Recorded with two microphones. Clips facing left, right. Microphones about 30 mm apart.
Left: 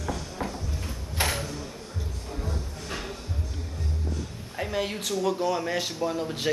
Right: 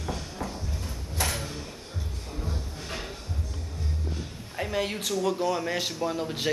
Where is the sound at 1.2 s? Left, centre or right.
Left.